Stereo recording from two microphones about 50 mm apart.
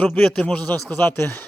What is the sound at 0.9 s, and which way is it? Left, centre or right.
Speech, left.